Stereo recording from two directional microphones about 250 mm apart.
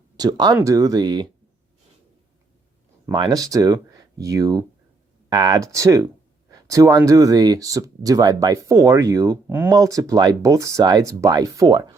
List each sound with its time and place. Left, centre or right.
0.2 s speech: centre
3.1 s speech: centre